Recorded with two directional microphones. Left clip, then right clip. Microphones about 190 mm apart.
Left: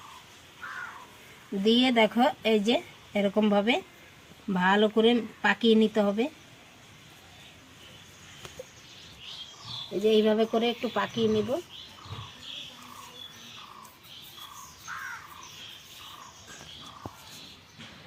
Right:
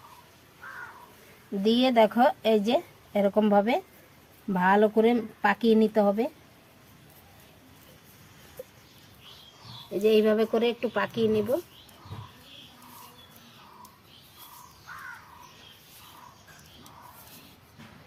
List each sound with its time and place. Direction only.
1.6 s speech: 20° right (ahead or behind)
10.0 s speech: 15° right (ahead or behind)